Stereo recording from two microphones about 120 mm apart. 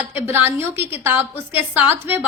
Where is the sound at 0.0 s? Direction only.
15° right (ahead or behind).